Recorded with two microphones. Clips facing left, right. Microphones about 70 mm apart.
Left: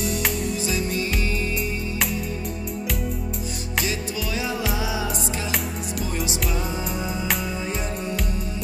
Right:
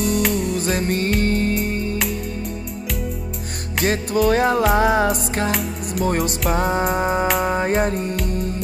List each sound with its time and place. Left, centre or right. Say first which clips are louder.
0.0 s music: right 6 dB; centre
0.7 s music: right 5 dB; right
3.8 s music: right 15 dB; right